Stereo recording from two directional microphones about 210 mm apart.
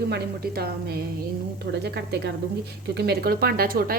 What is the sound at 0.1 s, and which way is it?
A woman's voice, 45° right (ahead or behind).